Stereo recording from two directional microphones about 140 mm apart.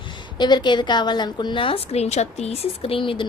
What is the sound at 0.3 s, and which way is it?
A woman's voice, 30° left (ahead or behind).